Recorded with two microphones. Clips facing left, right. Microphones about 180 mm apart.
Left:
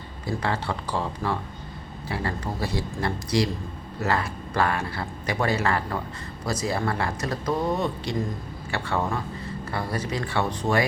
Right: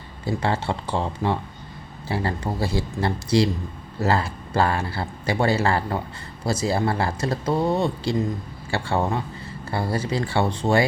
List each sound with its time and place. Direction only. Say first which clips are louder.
0.3 s speech: right 3 dB; 25° right (ahead or behind)